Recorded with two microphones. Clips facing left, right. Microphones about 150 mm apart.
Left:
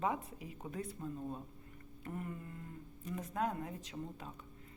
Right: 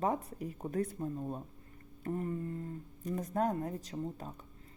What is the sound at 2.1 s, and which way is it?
A woman's voice, 35° right (ahead or behind).